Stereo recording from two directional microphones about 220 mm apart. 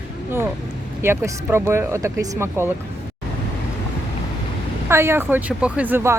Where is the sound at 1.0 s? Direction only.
10° right (ahead or behind).